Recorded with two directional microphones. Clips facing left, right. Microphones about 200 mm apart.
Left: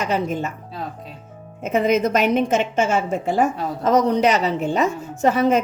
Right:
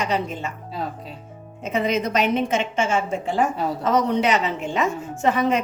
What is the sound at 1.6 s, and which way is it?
A woman's voice, 50° left (ahead or behind).